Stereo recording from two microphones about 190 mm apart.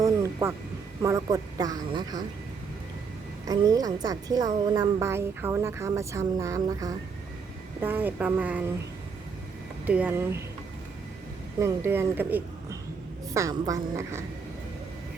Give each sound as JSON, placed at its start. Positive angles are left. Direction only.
{"t": 0.0, "sound": "music", "side_deg": -15}
{"t": 1.0, "sound": "speech", "side_deg": -15}
{"t": 3.4, "sound": "a woman's voice", "side_deg": -20}
{"t": 9.8, "sound": "a woman's voice", "side_deg": -10}
{"t": 11.6, "sound": "a woman's voice", "side_deg": -15}